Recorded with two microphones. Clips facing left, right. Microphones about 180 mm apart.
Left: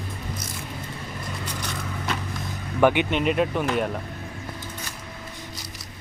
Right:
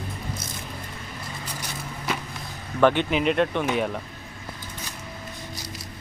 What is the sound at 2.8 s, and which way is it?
Speech, 10° left (ahead or behind).